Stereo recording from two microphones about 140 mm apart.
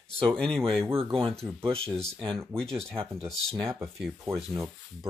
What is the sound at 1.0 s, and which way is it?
Speech, 40° right (ahead or behind).